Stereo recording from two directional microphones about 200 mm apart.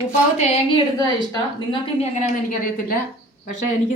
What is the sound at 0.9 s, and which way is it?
A woman's voice, 20° left (ahead or behind).